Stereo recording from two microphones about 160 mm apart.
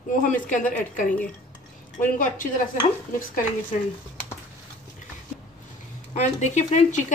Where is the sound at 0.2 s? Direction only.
55° left (ahead or behind).